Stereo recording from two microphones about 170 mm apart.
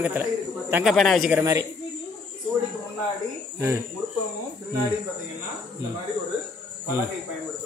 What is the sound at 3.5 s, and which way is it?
Speech, 15° right (ahead or behind).